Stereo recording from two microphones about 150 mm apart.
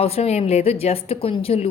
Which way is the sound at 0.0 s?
45° left (ahead or behind).